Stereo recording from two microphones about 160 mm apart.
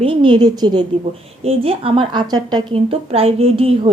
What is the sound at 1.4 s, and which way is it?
A woman's voice, 40° right (ahead or behind).